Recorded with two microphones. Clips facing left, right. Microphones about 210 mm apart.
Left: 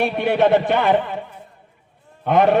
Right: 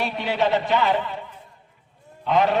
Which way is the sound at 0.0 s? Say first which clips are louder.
Left 6 dB; 55° left (ahead or behind).